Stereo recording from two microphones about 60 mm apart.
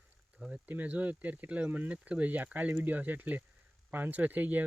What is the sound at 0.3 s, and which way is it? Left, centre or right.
Speech, centre.